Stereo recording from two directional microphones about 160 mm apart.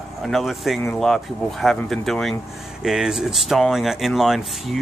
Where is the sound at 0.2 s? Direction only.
Centre (ahead or behind).